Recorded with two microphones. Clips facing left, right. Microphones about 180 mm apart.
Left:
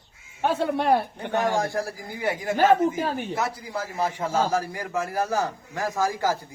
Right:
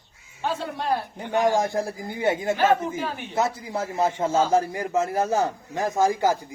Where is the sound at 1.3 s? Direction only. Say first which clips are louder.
Right 3 dB; 20° right (ahead or behind).